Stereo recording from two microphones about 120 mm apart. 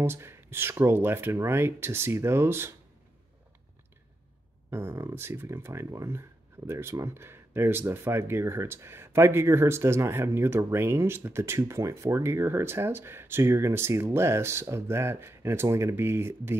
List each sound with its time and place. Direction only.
0.0 s speech: 20° right (ahead or behind)
4.6 s speech: 20° right (ahead or behind)